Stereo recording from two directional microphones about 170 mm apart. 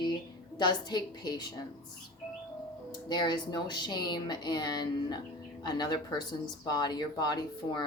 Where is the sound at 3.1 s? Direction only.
25° left (ahead or behind).